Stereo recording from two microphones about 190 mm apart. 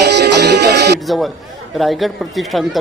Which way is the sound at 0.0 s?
60° right (ahead or behind).